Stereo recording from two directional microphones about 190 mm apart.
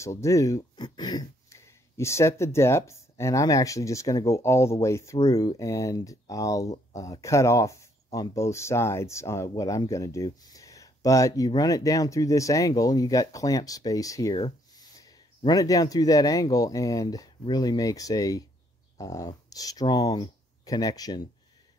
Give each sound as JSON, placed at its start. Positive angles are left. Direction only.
{"t": 0.0, "sound": "speech", "side_deg": 15}